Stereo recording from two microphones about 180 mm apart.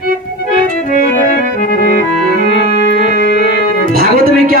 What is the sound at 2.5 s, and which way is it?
Organ, 65° left (ahead or behind).